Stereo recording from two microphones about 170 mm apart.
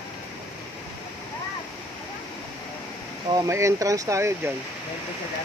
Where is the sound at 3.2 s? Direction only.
20° right (ahead or behind).